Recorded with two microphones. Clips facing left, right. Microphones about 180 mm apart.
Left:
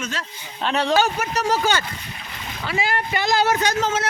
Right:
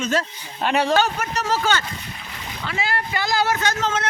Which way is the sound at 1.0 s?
10° left (ahead or behind).